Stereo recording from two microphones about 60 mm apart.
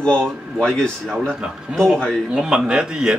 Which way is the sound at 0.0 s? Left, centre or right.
Centre.